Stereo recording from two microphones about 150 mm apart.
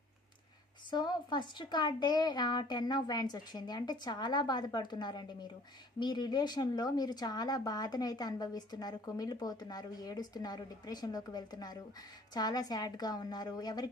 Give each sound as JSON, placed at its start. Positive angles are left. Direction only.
{"t": 0.9, "sound": "speech", "side_deg": 30}